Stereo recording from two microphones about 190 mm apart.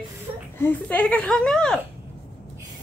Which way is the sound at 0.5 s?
10° left (ahead or behind).